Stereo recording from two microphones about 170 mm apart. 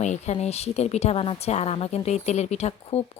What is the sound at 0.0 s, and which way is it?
A woman's voice, 40° left (ahead or behind).